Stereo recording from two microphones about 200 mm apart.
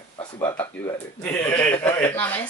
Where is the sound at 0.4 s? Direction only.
10° left (ahead or behind).